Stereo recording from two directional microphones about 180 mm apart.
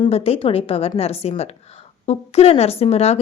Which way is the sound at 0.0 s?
35° left (ahead or behind).